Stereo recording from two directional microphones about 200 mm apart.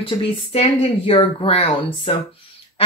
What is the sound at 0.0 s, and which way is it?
A woman's voice, 30° left (ahead or behind).